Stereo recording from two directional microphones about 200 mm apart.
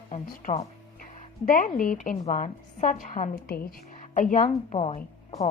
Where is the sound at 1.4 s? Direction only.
40° left (ahead or behind).